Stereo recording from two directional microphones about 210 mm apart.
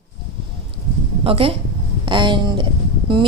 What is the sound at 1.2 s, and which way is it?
A woman's voice, 25° right (ahead or behind).